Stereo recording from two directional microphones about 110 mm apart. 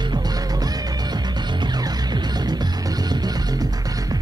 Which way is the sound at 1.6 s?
40° right (ahead or behind).